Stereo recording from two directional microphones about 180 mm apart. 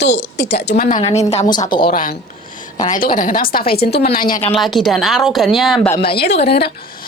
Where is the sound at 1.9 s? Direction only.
50° left (ahead or behind).